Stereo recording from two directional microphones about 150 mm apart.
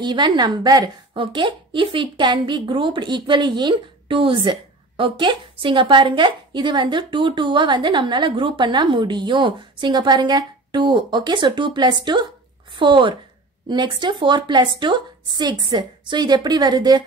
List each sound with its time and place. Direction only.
0.0 s a woman's voice: 30° right (ahead or behind)